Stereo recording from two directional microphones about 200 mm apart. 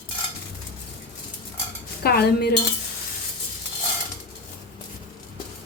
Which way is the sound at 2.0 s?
55° left (ahead or behind).